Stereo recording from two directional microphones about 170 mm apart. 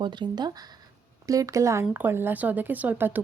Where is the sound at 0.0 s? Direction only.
25° right (ahead or behind).